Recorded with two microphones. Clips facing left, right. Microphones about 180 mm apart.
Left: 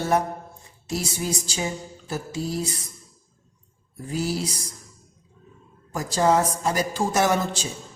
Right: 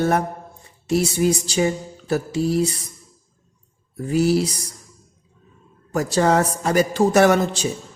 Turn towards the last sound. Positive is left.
turn(degrees=-65)  # may be behind; listen again after turning